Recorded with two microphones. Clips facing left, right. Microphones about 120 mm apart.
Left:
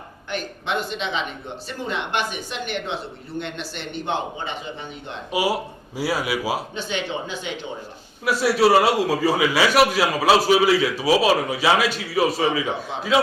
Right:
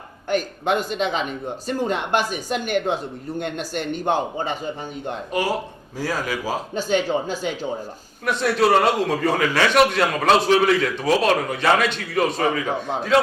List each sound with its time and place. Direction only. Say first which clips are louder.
0.3 s speech: right 6 dB; 45° right (ahead or behind)
5.3 s a man's voice: left 2 dB; 10° left (ahead or behind)
6.7 s speech: right 6 dB; 40° right (ahead or behind)
8.2 s a man's voice: left 1 dB; 5° left (ahead or behind)